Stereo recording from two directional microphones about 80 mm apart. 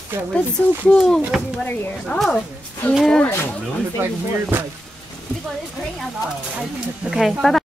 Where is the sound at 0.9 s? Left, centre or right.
Centre.